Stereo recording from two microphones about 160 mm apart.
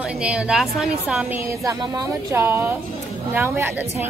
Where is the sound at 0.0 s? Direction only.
5° right (ahead or behind).